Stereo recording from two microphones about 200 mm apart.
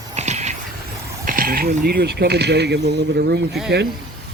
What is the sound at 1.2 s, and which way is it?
Speech, 45° right (ahead or behind).